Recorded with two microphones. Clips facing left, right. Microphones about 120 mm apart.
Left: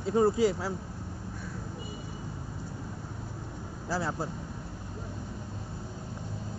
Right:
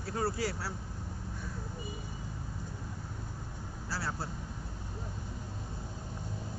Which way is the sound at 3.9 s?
15° left (ahead or behind).